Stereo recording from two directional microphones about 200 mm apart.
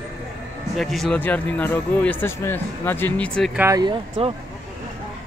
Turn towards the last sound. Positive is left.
turn(degrees=-30)  # may be behind; listen again after turning